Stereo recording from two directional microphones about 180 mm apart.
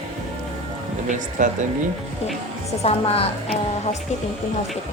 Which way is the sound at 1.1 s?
45° right (ahead or behind).